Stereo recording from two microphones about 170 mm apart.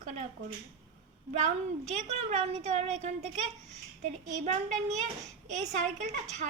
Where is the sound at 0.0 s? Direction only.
45° right (ahead or behind).